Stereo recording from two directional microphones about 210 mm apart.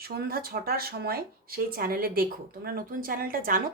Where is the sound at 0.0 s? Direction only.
45° right (ahead or behind).